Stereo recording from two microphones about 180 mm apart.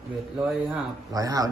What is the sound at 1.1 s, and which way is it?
Speech, 20° right (ahead or behind).